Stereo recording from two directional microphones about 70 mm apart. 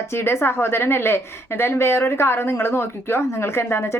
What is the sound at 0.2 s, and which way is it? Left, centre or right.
A woman's voice, left.